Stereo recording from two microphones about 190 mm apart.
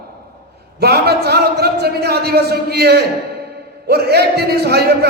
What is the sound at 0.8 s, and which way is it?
A man's voice, 55° right (ahead or behind).